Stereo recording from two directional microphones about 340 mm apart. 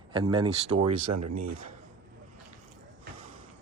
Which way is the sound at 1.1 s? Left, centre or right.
Right.